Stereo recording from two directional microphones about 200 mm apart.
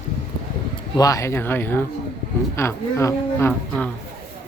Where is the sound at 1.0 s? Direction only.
15° left (ahead or behind).